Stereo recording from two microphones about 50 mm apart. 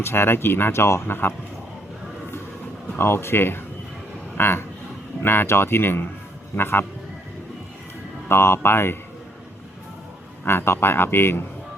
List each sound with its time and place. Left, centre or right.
0.0 s speech: left
3.0 s speech: left
8.3 s speech: left
10.4 s speech: left